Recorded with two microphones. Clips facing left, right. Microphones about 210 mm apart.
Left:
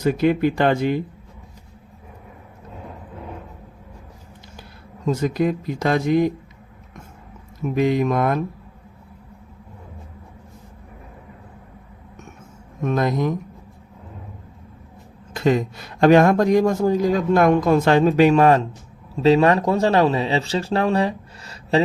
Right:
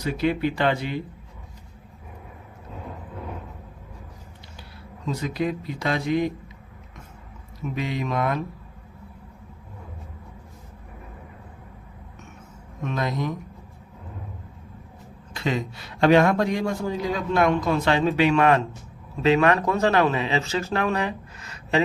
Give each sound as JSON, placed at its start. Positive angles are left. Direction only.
{"t": 0.0, "sound": "a man's voice", "side_deg": 50}
{"t": 5.0, "sound": "a man's voice", "side_deg": 45}
{"t": 7.6, "sound": "a man's voice", "side_deg": 45}
{"t": 12.8, "sound": "a man's voice", "side_deg": 45}
{"t": 15.4, "sound": "a man's voice", "side_deg": 45}